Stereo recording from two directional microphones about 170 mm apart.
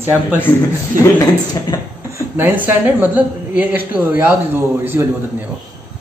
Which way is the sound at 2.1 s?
10° right (ahead or behind).